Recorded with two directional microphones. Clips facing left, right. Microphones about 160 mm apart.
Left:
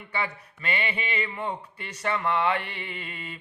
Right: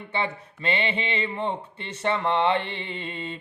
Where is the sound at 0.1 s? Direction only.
25° right (ahead or behind).